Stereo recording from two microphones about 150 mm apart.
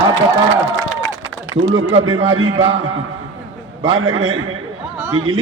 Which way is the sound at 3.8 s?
25° right (ahead or behind).